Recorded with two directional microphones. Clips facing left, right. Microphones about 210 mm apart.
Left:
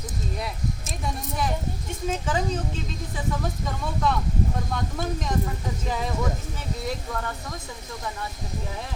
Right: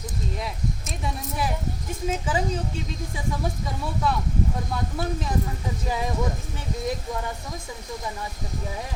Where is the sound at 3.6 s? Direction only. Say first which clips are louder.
Left 2 dB; 10° right (ahead or behind).